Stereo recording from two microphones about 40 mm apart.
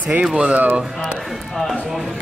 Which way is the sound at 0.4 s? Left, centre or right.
Right.